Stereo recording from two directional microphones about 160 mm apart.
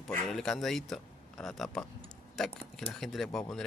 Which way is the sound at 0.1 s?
5° left (ahead or behind).